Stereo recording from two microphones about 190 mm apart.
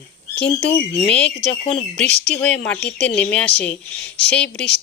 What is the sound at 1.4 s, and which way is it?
Speech, 30° left (ahead or behind).